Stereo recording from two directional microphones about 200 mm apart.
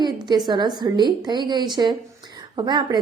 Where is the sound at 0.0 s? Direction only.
20° right (ahead or behind).